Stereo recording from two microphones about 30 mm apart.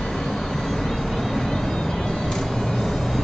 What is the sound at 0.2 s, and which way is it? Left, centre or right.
Vehicle, centre.